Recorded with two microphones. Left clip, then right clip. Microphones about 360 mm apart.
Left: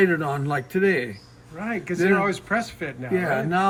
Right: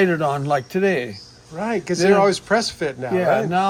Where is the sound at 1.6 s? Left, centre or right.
Centre.